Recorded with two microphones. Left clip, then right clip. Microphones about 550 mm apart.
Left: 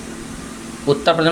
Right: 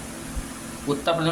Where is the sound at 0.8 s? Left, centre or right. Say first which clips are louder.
Left 8 dB; right.